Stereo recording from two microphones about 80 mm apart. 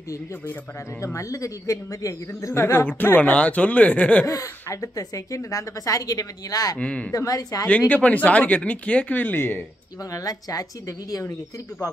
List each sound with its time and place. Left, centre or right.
1.0 s speech: left; by 4.3 s centre
4.3 s a woman's voice: left
6.8 s speech: centre
7.1 s a woman's voice: left
7.9 s speech: centre
10.1 s a woman's voice: left